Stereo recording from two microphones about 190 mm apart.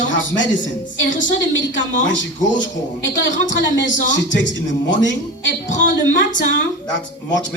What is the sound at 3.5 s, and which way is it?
A man's voice, 75° left (ahead or behind).